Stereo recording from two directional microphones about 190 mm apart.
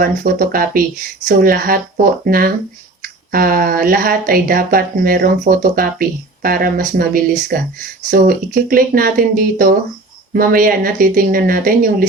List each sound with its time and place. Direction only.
0.0 s speech: 50° right (ahead or behind)